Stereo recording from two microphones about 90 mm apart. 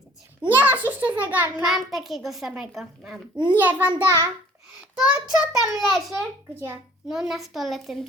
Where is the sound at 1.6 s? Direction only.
5° right (ahead or behind).